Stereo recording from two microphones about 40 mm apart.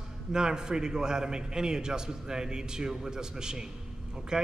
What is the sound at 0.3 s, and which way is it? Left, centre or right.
Speech, centre.